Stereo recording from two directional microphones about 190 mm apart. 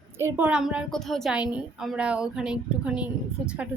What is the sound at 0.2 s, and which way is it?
A woman's voice, 10° right (ahead or behind).